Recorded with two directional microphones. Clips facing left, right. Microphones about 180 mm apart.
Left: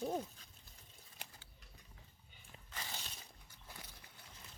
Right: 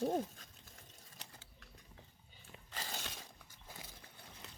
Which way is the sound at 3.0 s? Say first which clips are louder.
Right 6 dB; 90° right.